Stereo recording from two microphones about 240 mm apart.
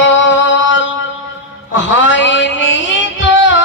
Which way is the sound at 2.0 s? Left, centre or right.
Left.